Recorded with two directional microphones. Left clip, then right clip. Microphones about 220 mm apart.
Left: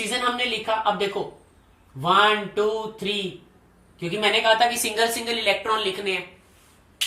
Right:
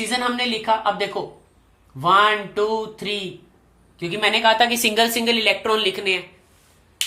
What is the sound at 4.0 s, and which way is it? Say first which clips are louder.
A woman's voice: right 3 dB; 30° right (ahead or behind).